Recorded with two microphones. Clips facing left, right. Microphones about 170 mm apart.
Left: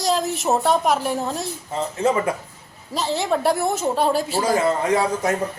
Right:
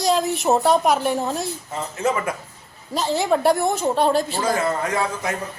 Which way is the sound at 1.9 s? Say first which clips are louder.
Left 2 dB; 30° left (ahead or behind).